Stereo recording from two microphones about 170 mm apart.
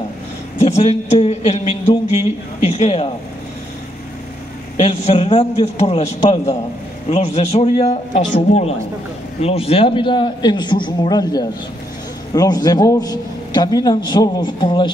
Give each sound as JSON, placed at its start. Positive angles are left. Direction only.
{"t": 0.6, "sound": "a man's voice", "side_deg": 40}
{"t": 4.7, "sound": "a man's voice", "side_deg": 40}